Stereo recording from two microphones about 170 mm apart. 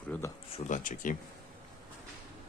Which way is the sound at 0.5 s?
50° left (ahead or behind).